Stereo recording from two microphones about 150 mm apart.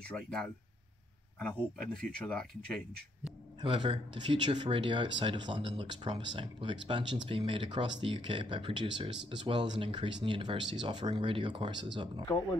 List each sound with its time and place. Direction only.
0.1 s speech: 5° left (ahead or behind)
2.1 s speech: 5° left (ahead or behind)
3.6 s speech: 35° right (ahead or behind)